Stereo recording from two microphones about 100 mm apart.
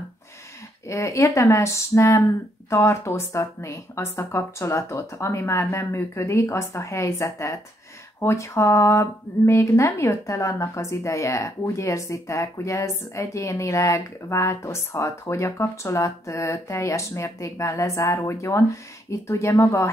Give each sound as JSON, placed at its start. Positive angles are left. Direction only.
{"t": 0.8, "sound": "a woman's voice", "side_deg": 30}